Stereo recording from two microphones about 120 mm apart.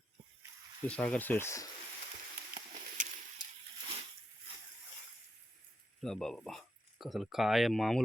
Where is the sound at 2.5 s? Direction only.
90° right.